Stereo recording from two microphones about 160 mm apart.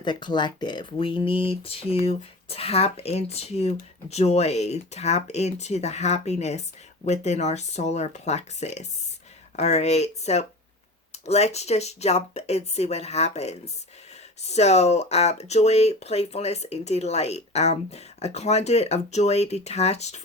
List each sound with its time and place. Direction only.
0.0 s speech: 30° left (ahead or behind); by 20.2 s 45° left (ahead or behind)